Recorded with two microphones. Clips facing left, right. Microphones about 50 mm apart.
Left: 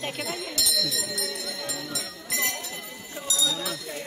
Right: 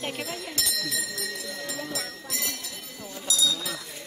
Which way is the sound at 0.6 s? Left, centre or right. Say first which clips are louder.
Left 1 dB; right.